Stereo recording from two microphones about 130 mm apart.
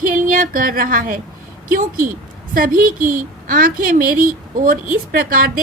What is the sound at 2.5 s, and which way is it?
A woman's voice, 90° right.